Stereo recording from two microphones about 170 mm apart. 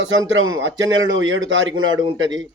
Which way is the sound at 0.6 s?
90° right.